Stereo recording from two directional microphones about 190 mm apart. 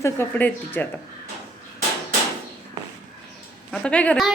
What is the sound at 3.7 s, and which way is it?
Speech, 5° left (ahead or behind).